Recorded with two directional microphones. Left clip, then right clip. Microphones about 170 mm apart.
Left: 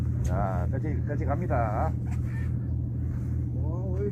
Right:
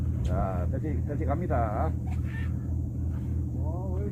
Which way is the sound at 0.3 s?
60° right (ahead or behind).